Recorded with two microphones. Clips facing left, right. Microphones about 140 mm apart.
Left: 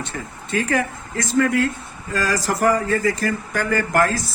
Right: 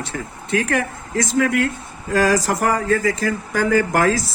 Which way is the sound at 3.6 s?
90° right.